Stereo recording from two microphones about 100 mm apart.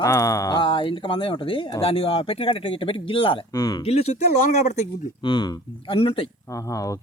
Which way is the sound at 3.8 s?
90° left.